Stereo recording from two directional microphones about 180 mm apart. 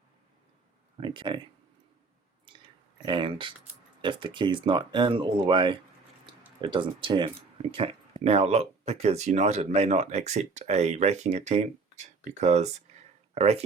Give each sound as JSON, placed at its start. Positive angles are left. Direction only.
{"t": 0.9, "sound": "speech", "side_deg": -30}
{"t": 3.1, "sound": "speech", "side_deg": -25}